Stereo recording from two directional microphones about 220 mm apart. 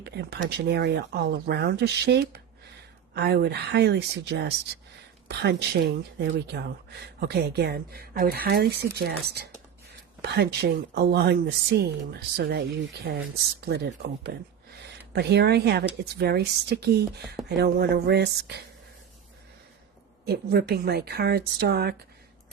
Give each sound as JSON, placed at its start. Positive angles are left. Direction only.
{"t": 0.0, "sound": "a woman's voice", "side_deg": -50}
{"t": 15.1, "sound": "a woman's voice", "side_deg": -50}
{"t": 20.2, "sound": "a woman's voice", "side_deg": -45}